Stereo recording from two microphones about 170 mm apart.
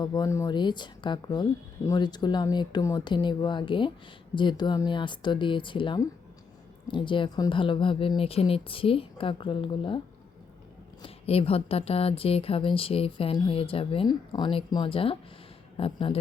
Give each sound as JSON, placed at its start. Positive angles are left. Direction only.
{"t": 0.0, "sound": "speech", "side_deg": 25}
{"t": 11.0, "sound": "speech", "side_deg": 35}